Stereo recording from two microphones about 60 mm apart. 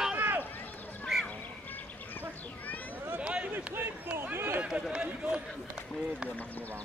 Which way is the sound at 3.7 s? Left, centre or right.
Right.